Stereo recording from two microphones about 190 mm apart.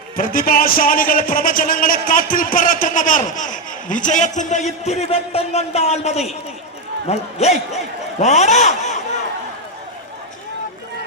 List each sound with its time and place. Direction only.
0.2 s a man's voice: 45° left (ahead or behind)